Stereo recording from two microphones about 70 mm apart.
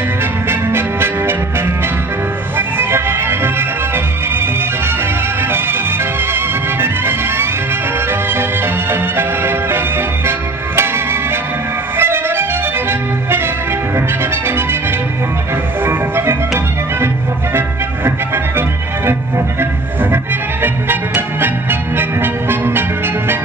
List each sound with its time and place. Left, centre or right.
0.5 s music: right
2.5 s music: right
6.3 s music: right
9.1 s music: right
12.0 s music: right
15.8 s music: right
17.6 s music: right
19.6 s music: right